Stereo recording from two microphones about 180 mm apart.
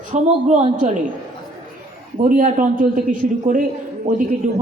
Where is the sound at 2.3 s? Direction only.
45° right (ahead or behind).